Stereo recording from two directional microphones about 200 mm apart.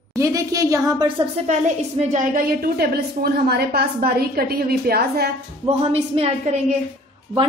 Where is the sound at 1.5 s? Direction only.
35° right (ahead or behind).